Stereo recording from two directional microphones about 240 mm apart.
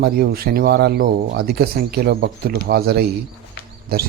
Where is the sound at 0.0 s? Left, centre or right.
Right.